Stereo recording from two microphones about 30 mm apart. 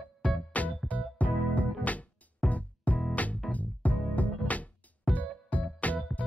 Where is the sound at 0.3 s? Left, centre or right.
Left.